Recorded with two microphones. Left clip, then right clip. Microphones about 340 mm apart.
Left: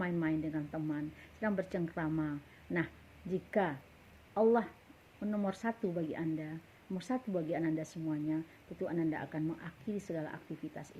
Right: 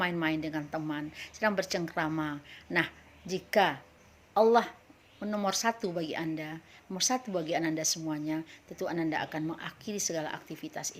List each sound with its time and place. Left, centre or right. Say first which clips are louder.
0.0 s speech: right 5 dB; right